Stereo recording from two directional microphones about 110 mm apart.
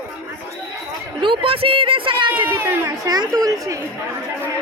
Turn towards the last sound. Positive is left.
turn(degrees=-35)  # may be behind; listen again after turning